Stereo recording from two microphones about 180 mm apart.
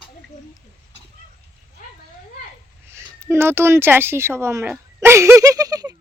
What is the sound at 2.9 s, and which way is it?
A woman's voice, 15° right (ahead or behind).